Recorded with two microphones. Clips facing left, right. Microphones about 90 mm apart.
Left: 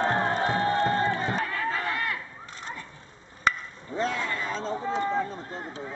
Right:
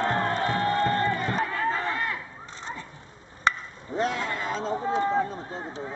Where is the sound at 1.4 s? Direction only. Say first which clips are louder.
Right 2 dB; 20° right (ahead or behind).